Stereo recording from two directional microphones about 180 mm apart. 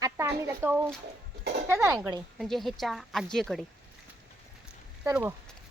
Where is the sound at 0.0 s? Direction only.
15° right (ahead or behind).